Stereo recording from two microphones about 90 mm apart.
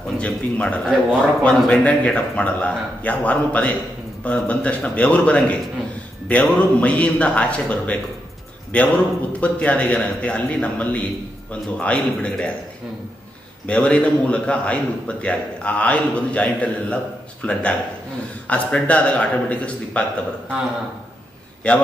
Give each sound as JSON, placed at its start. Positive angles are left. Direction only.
{"t": 0.2, "sound": "a man's voice", "side_deg": 15}
{"t": 13.7, "sound": "a man's voice", "side_deg": 10}
{"t": 21.6, "sound": "a man's voice", "side_deg": 15}